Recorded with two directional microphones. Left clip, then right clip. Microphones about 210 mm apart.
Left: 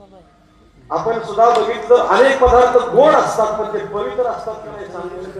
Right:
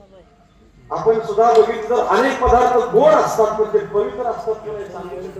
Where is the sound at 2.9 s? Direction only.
55° left (ahead or behind).